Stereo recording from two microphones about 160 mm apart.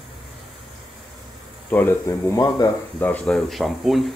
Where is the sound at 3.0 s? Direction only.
10° left (ahead or behind).